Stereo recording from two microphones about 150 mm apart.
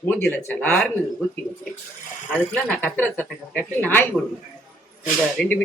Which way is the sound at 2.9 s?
10° left (ahead or behind).